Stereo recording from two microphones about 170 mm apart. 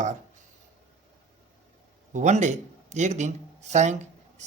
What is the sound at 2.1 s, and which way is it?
Speech, 45° right (ahead or behind).